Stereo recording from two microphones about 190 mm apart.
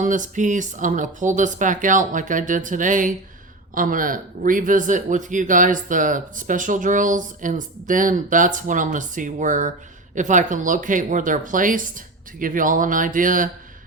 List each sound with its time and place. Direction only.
0.0 s speech: 40° right (ahead or behind)